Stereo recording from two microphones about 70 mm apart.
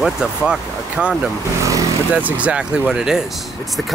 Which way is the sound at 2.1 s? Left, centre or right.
Right.